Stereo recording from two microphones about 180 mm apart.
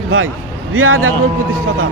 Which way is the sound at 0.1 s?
90° right.